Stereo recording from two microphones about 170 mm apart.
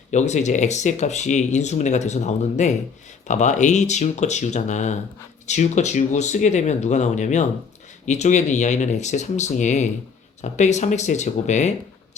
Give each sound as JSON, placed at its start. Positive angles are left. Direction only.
{"t": 0.1, "sound": "speech", "side_deg": 45}